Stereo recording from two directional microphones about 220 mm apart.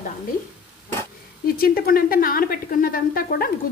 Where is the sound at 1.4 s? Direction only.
40° left (ahead or behind).